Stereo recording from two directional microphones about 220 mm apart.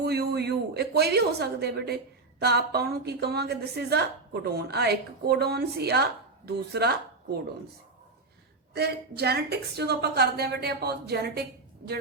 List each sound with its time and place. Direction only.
0.0 s a woman's voice: 45° right (ahead or behind)
8.7 s a woman's voice: 45° right (ahead or behind)